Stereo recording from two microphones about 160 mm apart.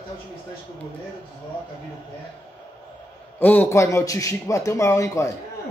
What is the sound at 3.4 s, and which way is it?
Speech, 10° left (ahead or behind).